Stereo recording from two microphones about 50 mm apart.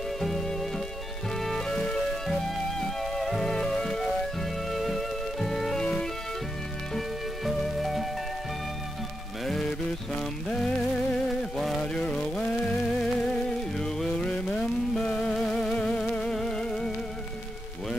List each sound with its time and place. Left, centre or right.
0.2 s music: centre
5.8 s music: centre
6.9 s music: centre
9.4 s music: centre
11.1 s music: centre
11.8 s a sound: centre
12.7 s music: centre